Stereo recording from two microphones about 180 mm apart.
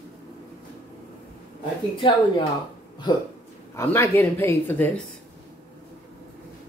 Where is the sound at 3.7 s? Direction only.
15° left (ahead or behind).